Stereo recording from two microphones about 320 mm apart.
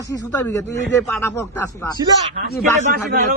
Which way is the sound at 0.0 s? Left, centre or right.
Centre.